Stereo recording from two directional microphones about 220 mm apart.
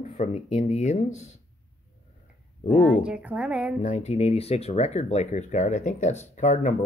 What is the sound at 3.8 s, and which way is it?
Speech, 30° left (ahead or behind).